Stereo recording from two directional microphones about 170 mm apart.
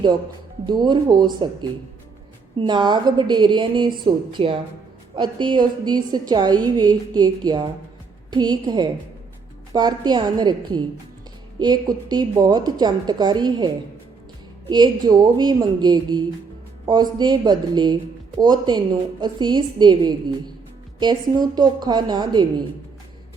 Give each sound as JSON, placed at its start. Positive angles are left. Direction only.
{"t": 0.6, "sound": "a woman's voice", "side_deg": -25}
{"t": 2.6, "sound": "a woman's voice", "side_deg": -25}
{"t": 14.7, "sound": "a woman's voice", "side_deg": -25}